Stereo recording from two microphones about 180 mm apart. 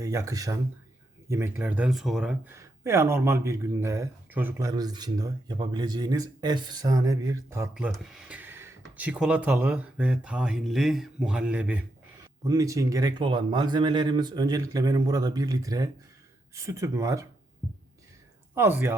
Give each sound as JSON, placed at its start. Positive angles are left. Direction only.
{"t": 0.0, "sound": "speech", "side_deg": -20}
{"t": 2.6, "sound": "speech", "side_deg": -15}
{"t": 7.7, "sound": "speech", "side_deg": -5}
{"t": 12.5, "sound": "speech", "side_deg": -20}
{"t": 18.5, "sound": "speech", "side_deg": -10}